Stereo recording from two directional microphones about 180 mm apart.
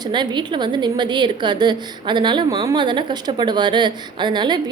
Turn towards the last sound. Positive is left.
turn(degrees=-25)  # may be behind; listen again after turning